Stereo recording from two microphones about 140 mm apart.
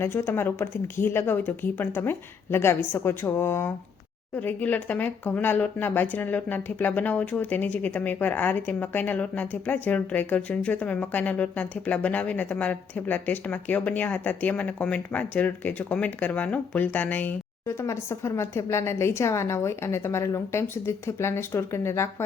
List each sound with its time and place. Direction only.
0.0 s speech: 15° left (ahead or behind)